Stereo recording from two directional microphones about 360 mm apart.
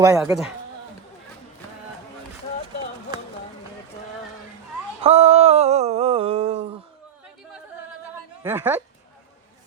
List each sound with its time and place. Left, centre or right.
0.0 s speech: centre
5.0 s a sound: centre
8.4 s speech: centre